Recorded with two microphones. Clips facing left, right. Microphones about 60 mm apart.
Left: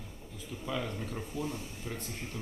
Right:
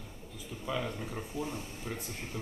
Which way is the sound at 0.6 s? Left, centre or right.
Centre.